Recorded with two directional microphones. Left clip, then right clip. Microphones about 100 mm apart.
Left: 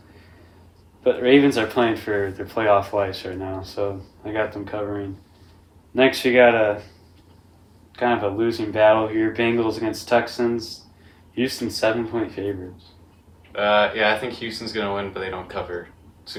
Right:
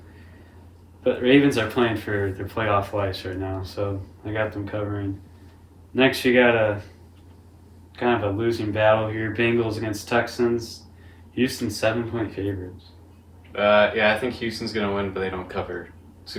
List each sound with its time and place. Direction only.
1.0 s speech: 45° left (ahead or behind)
7.9 s speech: 45° left (ahead or behind)
13.5 s speech: 15° left (ahead or behind)